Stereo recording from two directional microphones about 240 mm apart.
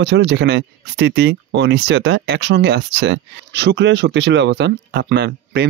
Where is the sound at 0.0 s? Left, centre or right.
Right.